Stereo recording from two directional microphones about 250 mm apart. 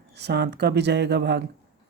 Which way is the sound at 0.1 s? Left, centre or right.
Right.